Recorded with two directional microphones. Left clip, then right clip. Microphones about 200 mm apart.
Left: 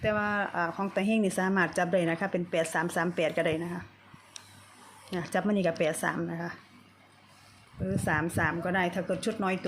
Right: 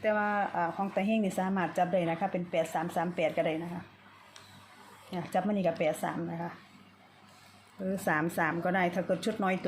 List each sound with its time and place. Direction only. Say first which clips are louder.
0.0 s speech: even; 10° left (ahead or behind)
5.1 s speech: left 2 dB; 20° left (ahead or behind)
7.9 s speech: left 1 dB; centre (ahead or behind)